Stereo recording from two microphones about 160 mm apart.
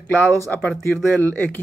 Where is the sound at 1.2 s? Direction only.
10° left (ahead or behind).